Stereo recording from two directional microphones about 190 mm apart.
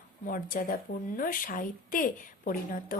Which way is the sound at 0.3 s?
45° left (ahead or behind).